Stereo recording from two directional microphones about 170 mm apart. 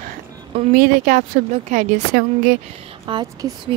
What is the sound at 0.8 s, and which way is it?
A woman's voice, 50° right (ahead or behind).